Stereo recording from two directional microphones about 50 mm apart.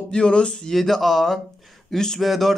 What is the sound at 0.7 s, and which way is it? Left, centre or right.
Speech, centre.